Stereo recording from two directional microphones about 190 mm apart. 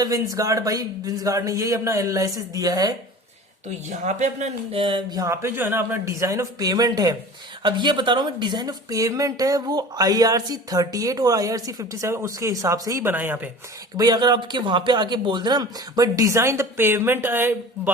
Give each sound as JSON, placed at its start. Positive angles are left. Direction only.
{"t": 0.0, "sound": "a man's voice", "side_deg": -20}
{"t": 3.8, "sound": "a woman's voice", "side_deg": -40}
{"t": 13.9, "sound": "a woman's voice", "side_deg": -20}